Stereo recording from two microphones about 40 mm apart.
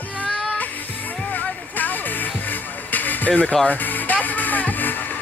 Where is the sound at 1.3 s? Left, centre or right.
Left.